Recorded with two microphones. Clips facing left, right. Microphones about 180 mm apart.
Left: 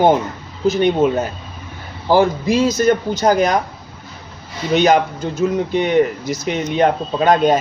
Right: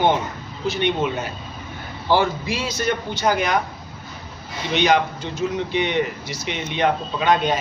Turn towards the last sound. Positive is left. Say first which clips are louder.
# left 6 dB
turn(degrees=45)  # may be behind; listen again after turning